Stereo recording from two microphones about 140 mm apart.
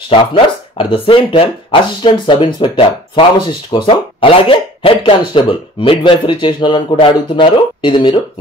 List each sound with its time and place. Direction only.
0.1 s speech: 40° left (ahead or behind)